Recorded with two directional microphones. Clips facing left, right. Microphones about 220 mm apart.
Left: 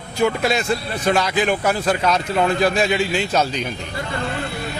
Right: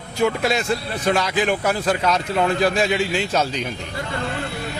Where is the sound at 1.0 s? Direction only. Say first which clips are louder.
Left 1 dB; 15° left (ahead or behind).